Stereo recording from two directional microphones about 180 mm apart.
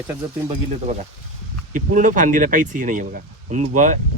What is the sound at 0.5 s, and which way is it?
Speech, 40° right (ahead or behind).